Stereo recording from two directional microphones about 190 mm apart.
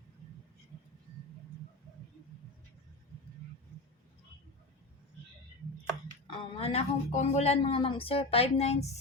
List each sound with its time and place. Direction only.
6.2 s speech: 30° left (ahead or behind)